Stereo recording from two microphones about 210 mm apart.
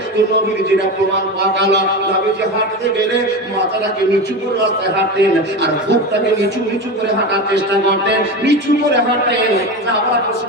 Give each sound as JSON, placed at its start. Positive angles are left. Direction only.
{"t": 1.4, "sound": "a man's voice", "side_deg": -55}
{"t": 7.5, "sound": "a man's voice", "side_deg": -55}